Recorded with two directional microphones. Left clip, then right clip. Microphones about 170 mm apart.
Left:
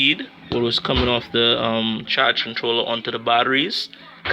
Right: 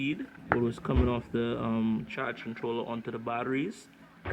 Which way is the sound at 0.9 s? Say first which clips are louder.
Left 11 dB; 45° left (ahead or behind).